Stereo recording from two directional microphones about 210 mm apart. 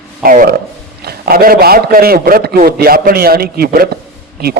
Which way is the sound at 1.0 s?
50° right (ahead or behind).